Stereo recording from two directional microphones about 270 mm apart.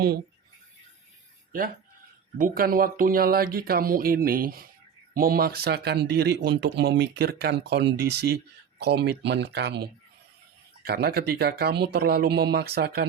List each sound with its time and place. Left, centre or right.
2.4 s speech: right